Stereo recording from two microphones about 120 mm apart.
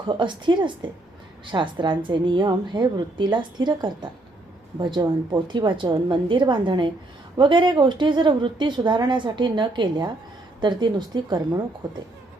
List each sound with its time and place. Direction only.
0.0 s speech: 40° right (ahead or behind)
5.3 s speech: 40° right (ahead or behind)